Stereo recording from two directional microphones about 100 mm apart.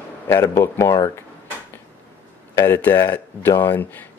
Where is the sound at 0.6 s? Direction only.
25° left (ahead or behind).